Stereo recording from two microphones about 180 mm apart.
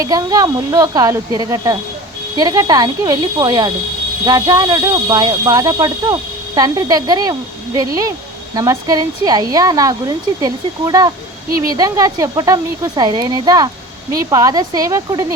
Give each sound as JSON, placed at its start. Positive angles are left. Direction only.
{"t": 0.0, "sound": "speech", "side_deg": -20}